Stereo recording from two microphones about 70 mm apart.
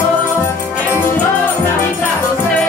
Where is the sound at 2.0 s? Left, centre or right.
Centre.